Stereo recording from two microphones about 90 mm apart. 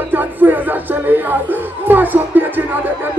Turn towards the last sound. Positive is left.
turn(degrees=-20)  # may be behind; listen again after turning